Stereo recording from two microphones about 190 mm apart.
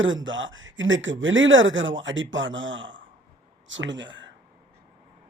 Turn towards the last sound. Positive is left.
turn(degrees=-75)  # may be behind; listen again after turning